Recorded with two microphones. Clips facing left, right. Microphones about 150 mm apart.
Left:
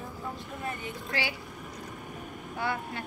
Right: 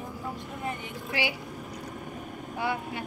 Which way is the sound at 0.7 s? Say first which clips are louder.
Right 1 dB; 15° right (ahead or behind).